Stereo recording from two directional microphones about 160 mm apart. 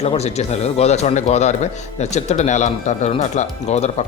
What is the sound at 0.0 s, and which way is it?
Speech, 40° left (ahead or behind).